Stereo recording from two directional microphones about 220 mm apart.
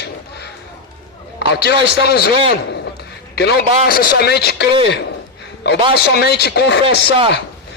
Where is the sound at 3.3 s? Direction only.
50° left (ahead or behind).